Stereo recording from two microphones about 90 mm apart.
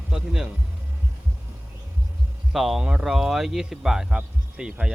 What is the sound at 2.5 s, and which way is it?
Speech, centre (ahead or behind).